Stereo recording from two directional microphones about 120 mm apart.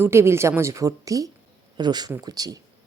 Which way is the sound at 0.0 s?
20° right (ahead or behind).